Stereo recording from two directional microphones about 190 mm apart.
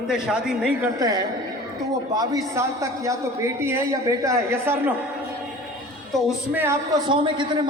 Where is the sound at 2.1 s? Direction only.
20° right (ahead or behind).